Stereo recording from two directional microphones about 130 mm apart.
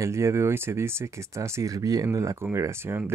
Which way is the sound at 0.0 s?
20° right (ahead or behind).